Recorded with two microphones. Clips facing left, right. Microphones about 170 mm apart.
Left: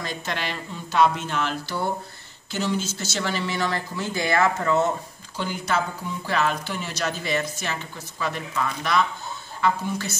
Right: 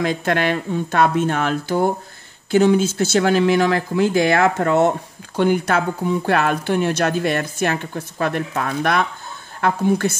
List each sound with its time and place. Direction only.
0.0 s speech: 55° right (ahead or behind)